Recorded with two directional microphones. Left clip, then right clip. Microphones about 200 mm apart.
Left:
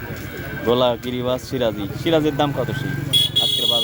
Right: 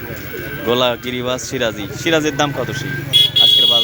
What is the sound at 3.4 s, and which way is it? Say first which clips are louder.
Vehicle: right 8 dB; 5° right (ahead or behind).